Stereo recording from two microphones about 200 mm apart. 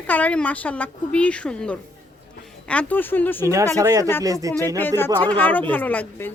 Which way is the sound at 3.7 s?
15° right (ahead or behind).